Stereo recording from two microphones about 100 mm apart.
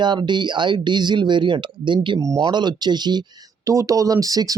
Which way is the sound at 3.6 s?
30° right (ahead or behind).